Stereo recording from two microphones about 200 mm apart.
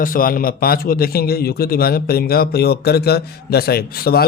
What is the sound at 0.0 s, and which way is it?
A man's voice, 45° left (ahead or behind).